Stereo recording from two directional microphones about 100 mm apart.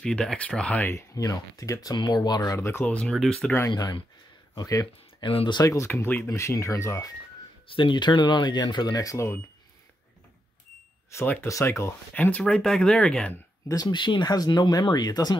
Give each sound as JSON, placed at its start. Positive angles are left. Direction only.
{"t": 0.0, "sound": "speech", "side_deg": 5}
{"t": 0.8, "sound": "speech", "side_deg": 30}
{"t": 2.8, "sound": "speech", "side_deg": 10}
{"t": 3.7, "sound": "speech", "side_deg": 40}
{"t": 5.2, "sound": "speech", "side_deg": 60}
{"t": 5.6, "sound": "speech", "side_deg": 30}
{"t": 7.6, "sound": "speech", "side_deg": 60}
{"t": 11.4, "sound": "speech", "side_deg": 30}
{"t": 12.1, "sound": "speech", "side_deg": 15}
{"t": 13.7, "sound": "speech", "side_deg": 45}